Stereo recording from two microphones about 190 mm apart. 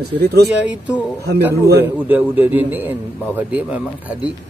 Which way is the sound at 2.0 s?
10° right (ahead or behind).